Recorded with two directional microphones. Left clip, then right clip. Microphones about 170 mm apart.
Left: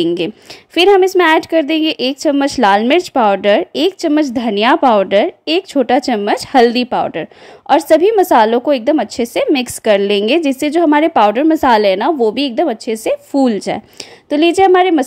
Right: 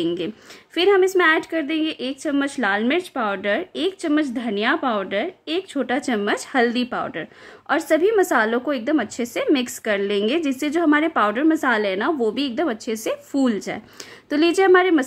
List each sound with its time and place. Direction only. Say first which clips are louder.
0.0 s a woman's voice: left 8 dB; 35° left (ahead or behind)